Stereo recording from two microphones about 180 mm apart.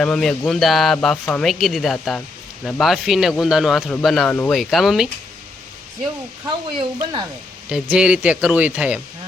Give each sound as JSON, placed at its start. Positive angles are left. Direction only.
{"t": 0.0, "sound": "speech", "side_deg": 5}
{"t": 6.7, "sound": "speech", "side_deg": -25}
{"t": 7.7, "sound": "speech", "side_deg": -5}